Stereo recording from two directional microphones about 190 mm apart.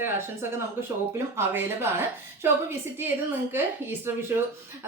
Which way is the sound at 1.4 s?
10° right (ahead or behind).